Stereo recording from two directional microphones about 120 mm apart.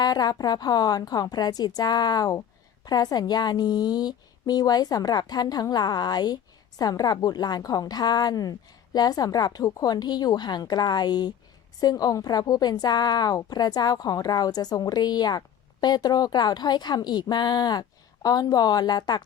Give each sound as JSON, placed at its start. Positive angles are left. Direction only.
{"t": 0.0, "sound": "a woman's voice", "side_deg": 35}